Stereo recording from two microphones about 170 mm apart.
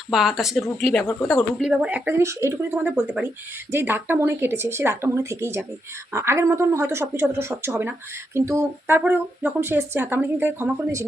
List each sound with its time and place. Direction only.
0.1 s speech: centre (ahead or behind)